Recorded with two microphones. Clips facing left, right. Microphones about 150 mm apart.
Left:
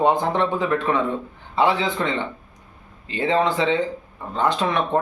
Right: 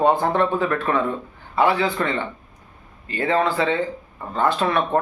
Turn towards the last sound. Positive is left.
turn(degrees=15)  # may be behind; listen again after turning